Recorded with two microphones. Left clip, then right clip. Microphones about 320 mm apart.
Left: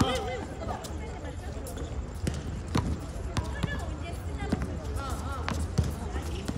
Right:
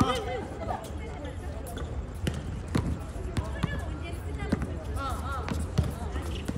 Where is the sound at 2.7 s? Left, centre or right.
Centre.